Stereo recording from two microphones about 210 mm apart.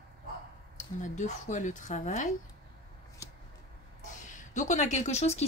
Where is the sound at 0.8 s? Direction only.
35° left (ahead or behind).